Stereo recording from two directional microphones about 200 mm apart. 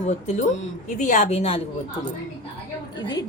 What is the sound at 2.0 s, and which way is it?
Speech, 20° left (ahead or behind).